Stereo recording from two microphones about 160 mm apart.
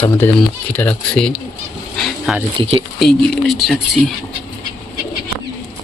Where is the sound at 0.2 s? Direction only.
10° left (ahead or behind).